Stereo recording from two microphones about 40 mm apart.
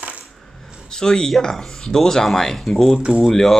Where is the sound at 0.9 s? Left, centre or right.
Centre.